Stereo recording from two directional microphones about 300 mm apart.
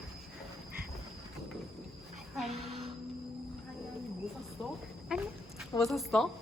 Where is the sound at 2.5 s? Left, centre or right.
Right.